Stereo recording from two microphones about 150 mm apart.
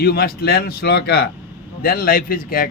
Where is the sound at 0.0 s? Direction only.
90° left.